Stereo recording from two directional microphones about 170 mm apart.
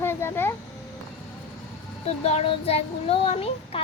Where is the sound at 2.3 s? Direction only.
35° left (ahead or behind).